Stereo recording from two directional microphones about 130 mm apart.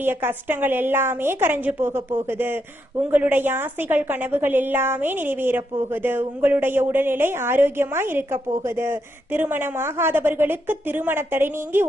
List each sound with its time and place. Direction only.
0.0 s a woman's voice: 15° right (ahead or behind)